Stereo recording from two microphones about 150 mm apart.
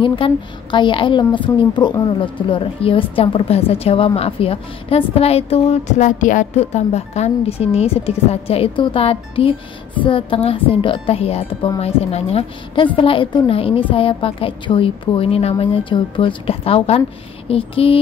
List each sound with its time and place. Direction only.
0.0 s a woman's voice: 35° left (ahead or behind)